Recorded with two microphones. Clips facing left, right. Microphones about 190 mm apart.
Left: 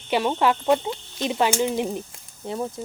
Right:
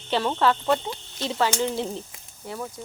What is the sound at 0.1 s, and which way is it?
Speech, 15° left (ahead or behind).